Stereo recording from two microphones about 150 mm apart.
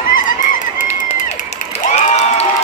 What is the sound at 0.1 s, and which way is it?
Crowd, 65° left (ahead or behind).